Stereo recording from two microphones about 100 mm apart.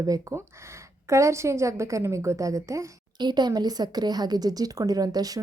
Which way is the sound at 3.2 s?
45° right (ahead or behind).